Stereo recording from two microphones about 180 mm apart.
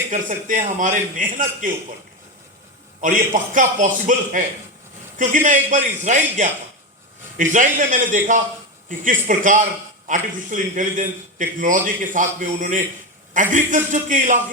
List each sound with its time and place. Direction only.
0.1 s a man's voice: 45° right (ahead or behind)
3.0 s a man's voice: 45° right (ahead or behind)